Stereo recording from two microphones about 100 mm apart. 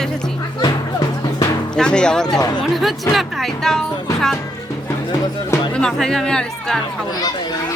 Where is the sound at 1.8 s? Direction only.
10° left (ahead or behind).